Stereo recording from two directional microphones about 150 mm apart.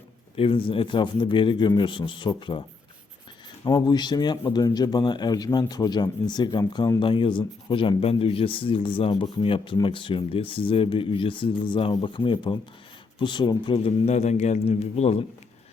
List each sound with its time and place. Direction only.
0.3 s speech: 35° left (ahead or behind)
3.6 s speech: 30° left (ahead or behind); by 15.2 s 45° left (ahead or behind)